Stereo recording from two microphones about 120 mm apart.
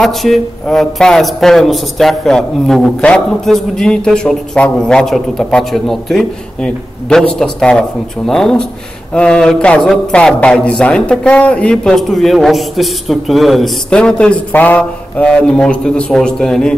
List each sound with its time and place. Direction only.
0.0 s a man's voice: centre (ahead or behind)